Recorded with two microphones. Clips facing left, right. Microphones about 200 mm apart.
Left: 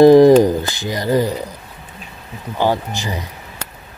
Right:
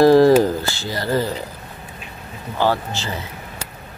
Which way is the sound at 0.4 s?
15° left (ahead or behind).